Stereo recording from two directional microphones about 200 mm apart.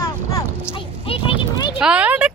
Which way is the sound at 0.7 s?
25° left (ahead or behind).